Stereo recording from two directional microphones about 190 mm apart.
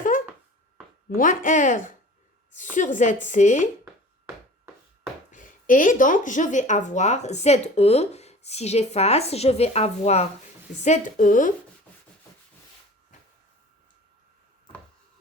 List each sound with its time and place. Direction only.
1.1 s speech: 45° left (ahead or behind)
5.3 s a woman's voice: 45° left (ahead or behind)